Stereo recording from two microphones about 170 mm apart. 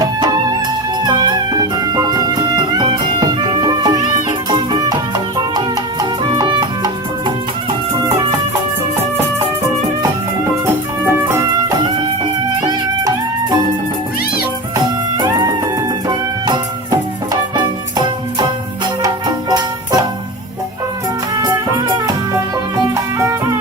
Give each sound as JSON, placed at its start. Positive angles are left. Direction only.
{"t": 1.0, "sound": "music", "side_deg": -25}
{"t": 15.2, "sound": "music", "side_deg": -20}
{"t": 21.4, "sound": "music", "side_deg": -25}